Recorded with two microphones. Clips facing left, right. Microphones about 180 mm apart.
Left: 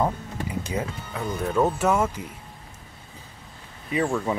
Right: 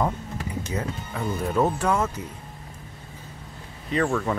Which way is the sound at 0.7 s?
10° left (ahead or behind).